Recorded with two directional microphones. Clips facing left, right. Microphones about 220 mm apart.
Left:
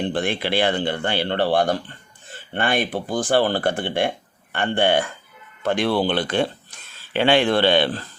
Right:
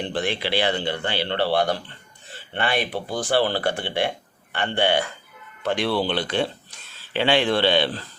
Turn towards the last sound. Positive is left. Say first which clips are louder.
# left 3 dB
turn(degrees=50)  # may be behind; listen again after turning